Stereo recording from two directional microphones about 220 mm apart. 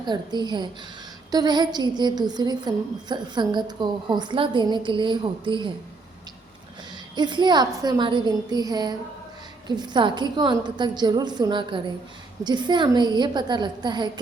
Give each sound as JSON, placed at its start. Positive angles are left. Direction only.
{"t": 0.0, "sound": "a woman's voice", "side_deg": -20}
{"t": 7.2, "sound": "a woman's voice", "side_deg": -20}